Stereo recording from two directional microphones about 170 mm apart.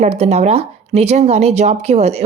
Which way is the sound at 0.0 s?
40° right (ahead or behind).